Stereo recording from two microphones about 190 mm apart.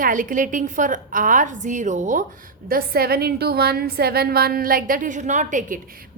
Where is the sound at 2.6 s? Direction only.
50° right (ahead or behind).